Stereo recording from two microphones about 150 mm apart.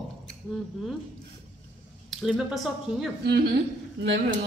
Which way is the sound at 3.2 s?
90° right.